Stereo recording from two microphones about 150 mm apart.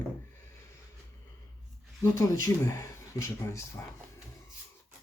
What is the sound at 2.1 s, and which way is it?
Speech, 25° left (ahead or behind).